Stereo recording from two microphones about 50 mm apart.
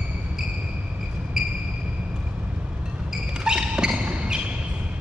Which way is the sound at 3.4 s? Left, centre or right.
Centre.